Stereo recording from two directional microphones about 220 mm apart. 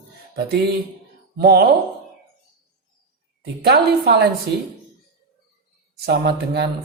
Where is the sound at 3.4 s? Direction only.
45° right (ahead or behind).